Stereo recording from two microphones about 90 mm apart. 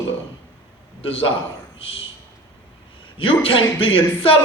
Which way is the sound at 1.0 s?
90° left.